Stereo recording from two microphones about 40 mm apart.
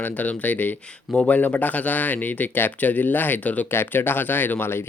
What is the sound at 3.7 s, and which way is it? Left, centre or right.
Speech, left.